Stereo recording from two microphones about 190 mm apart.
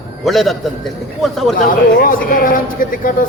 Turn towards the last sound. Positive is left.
turn(degrees=45)  # may be behind; listen again after turning